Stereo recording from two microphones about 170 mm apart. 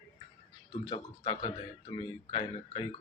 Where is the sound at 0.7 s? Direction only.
30° left (ahead or behind).